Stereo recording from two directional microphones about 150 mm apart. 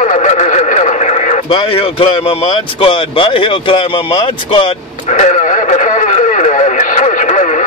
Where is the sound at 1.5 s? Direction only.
35° left (ahead or behind).